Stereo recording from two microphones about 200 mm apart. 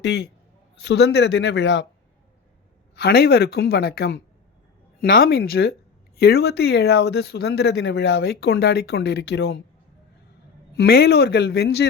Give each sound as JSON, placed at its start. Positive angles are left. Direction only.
{"t": 0.0, "sound": "speech", "side_deg": 60}
{"t": 2.9, "sound": "speech", "side_deg": 55}
{"t": 10.8, "sound": "speech", "side_deg": 55}